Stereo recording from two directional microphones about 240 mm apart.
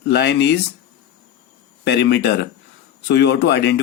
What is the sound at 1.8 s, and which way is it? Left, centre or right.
Speech, left.